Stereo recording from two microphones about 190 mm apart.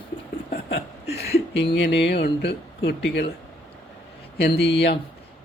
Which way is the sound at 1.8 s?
65° left (ahead or behind).